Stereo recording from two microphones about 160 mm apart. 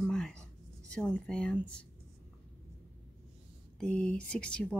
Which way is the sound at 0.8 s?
5° left (ahead or behind).